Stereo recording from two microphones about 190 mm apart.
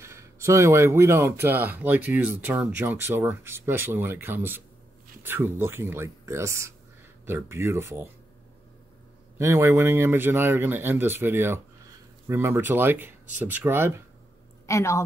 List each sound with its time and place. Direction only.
0.0 s speech: 15° right (ahead or behind)
9.4 s speech: 15° right (ahead or behind)
14.7 s a woman's voice: 15° left (ahead or behind)